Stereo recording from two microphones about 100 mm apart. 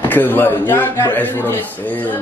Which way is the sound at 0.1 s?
20° left (ahead or behind).